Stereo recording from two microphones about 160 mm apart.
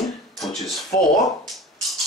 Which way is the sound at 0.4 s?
Centre (ahead or behind).